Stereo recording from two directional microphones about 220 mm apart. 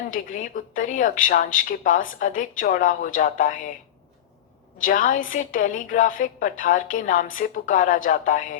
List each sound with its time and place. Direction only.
0.1 s a woman's voice: 35° left (ahead or behind)
4.8 s a woman's voice: 35° left (ahead or behind)